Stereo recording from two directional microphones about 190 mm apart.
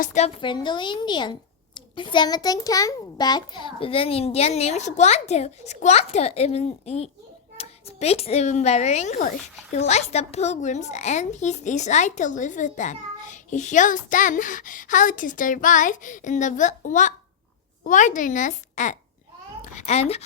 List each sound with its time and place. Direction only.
0.0 s a child's voice: 40° left (ahead or behind)